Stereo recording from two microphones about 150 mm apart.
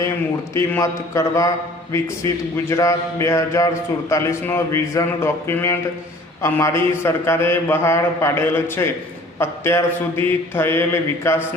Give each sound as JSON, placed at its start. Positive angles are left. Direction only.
{"t": 0.5, "sound": "a man's voice", "side_deg": 20}